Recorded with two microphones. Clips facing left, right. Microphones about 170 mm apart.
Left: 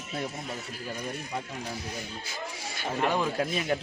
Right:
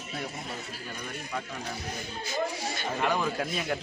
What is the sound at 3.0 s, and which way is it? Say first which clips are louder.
Speech: left 2 dB; 25° left (ahead or behind).